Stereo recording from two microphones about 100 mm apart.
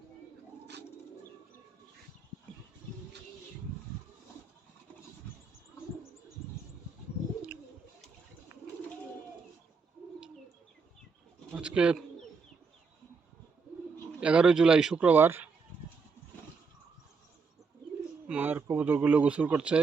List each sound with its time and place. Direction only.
11.5 s pigeon: 10° right (ahead or behind)
14.2 s speech: 10° right (ahead or behind)
14.9 s speech: 15° right (ahead or behind)
18.3 s a sound: 15° right (ahead or behind)